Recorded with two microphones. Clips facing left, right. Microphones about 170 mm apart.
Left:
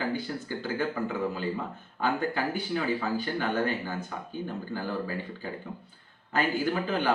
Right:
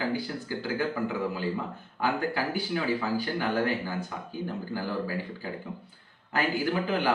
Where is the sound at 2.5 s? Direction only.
10° right (ahead or behind).